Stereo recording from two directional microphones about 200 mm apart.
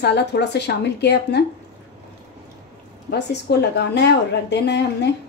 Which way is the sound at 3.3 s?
55° left (ahead or behind).